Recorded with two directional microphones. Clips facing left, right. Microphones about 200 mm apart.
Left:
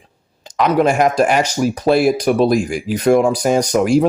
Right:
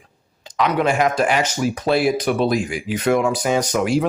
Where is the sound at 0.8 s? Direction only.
45° left (ahead or behind).